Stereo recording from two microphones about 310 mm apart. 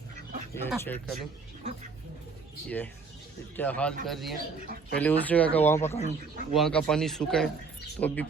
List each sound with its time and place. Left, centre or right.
0.5 s speech: centre
2.6 s speech: centre
5.9 s speech: left
6.5 s speech: centre